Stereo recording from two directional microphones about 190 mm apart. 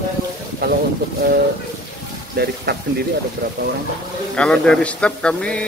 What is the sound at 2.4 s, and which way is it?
Speech, 55° right (ahead or behind).